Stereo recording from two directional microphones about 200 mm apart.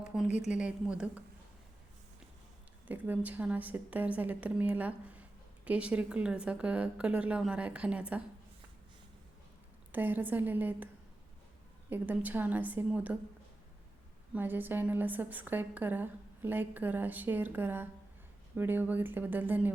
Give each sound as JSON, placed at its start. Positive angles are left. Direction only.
{"t": 0.0, "sound": "a sound", "side_deg": -5}
{"t": 0.3, "sound": "speech", "side_deg": 35}
{"t": 0.5, "sound": "a woman's voice", "side_deg": -5}
{"t": 2.8, "sound": "a woman's voice", "side_deg": -10}
{"t": 9.9, "sound": "a woman's voice", "side_deg": -10}
{"t": 11.9, "sound": "a woman's voice", "side_deg": -10}
{"t": 14.3, "sound": "a woman's voice", "side_deg": -10}